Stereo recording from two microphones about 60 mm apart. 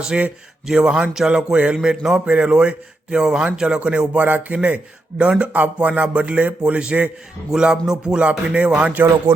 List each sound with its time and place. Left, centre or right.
0.1 s a man's voice: centre
7.5 s a man's voice: centre
9.0 s speech: right